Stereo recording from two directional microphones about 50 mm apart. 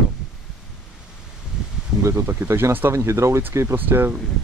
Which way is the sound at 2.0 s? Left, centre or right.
Right.